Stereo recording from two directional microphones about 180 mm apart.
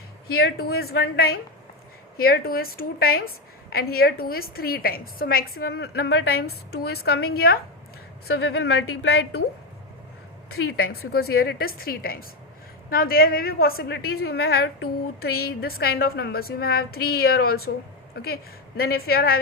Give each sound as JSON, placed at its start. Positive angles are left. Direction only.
{"t": 0.3, "sound": "a woman's voice", "side_deg": 60}
{"t": 10.6, "sound": "a woman's voice", "side_deg": 90}
{"t": 11.1, "sound": "a woman's voice", "side_deg": 60}
{"t": 18.8, "sound": "a woman's voice", "side_deg": 60}